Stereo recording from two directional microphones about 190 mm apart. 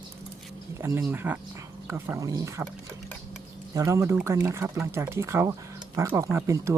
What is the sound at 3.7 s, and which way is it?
Speech, 15° right (ahead or behind).